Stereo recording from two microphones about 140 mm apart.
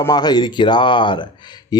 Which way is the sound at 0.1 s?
30° left (ahead or behind).